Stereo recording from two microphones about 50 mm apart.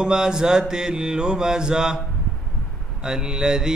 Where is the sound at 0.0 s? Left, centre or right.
Centre.